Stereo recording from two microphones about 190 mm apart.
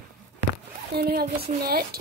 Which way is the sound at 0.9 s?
55° right (ahead or behind).